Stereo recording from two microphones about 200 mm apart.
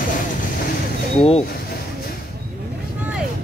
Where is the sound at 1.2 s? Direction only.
30° left (ahead or behind).